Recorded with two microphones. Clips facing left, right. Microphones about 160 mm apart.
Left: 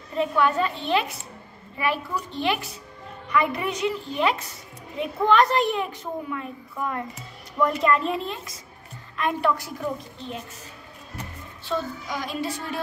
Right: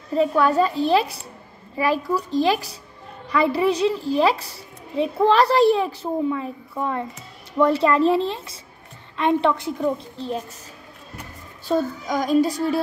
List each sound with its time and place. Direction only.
0.1 s a child's voice: 35° right (ahead or behind)
11.6 s a child's voice: 45° right (ahead or behind)